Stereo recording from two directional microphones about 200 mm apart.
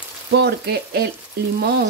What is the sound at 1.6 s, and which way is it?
Speech, 55° right (ahead or behind).